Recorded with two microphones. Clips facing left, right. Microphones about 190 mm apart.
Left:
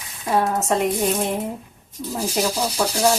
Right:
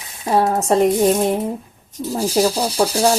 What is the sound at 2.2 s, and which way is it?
Speech, 35° right (ahead or behind).